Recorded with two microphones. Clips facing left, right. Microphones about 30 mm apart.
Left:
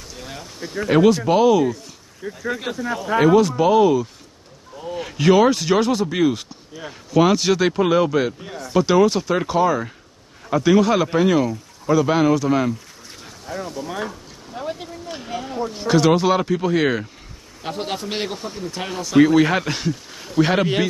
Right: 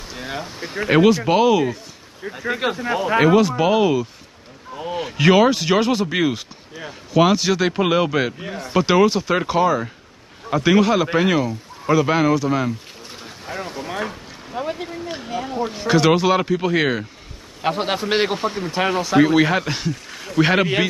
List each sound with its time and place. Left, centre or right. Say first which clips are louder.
0.1 s speech: right 7 dB; right
0.8 s a man's voice: even; right
2.5 s speech: right 7 dB; right
3.2 s speech: left 1 dB; centre
5.2 s speech: even; centre
6.3 s speech: even; centre
7.7 s a man's voice: left 1 dB; centre
14.5 s a sound: right 3 dB; centre
15.8 s speech: even; centre
17.6 s a man's voice: right 5 dB; right
18.4 s speech: right 6 dB; right
18.7 s a man's voice: right 8 dB; right
19.1 s speech: left 2 dB; centre